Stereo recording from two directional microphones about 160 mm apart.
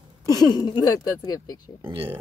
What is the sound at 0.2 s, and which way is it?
Speech, 25° left (ahead or behind).